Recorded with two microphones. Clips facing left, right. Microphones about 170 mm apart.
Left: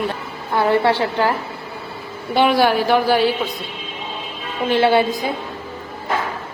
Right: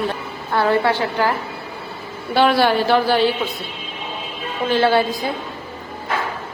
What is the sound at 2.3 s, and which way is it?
Speech, 15° left (ahead or behind).